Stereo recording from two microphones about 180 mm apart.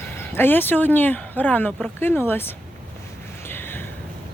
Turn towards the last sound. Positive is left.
turn(degrees=10)  # may be behind; listen again after turning